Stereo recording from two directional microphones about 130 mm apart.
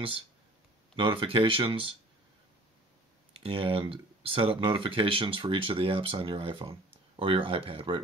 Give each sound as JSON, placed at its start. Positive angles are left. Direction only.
{"t": 0.9, "sound": "speech", "side_deg": -40}
{"t": 3.4, "sound": "speech", "side_deg": -45}